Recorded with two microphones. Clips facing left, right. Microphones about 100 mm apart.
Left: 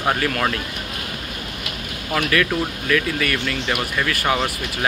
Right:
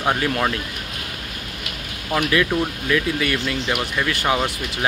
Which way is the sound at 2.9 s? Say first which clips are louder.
Left 1 dB; 20° right (ahead or behind).